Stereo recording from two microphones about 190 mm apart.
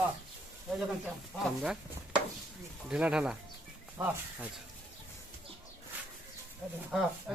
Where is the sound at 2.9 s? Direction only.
5° right (ahead or behind).